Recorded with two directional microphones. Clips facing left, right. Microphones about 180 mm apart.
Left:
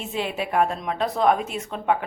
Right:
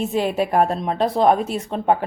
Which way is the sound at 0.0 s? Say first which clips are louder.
Right 7 dB; 40° right (ahead or behind).